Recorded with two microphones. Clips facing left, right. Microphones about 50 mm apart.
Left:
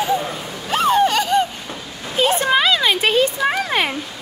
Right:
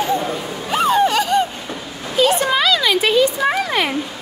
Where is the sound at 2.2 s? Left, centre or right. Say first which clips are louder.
Right 1 dB; left.